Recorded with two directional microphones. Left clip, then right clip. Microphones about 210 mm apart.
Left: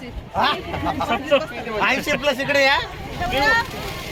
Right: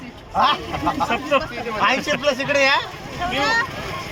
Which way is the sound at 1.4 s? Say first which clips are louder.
Right 1 dB; 25° left (ahead or behind).